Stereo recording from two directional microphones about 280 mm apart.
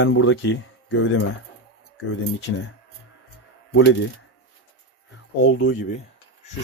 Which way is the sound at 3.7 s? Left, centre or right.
Left.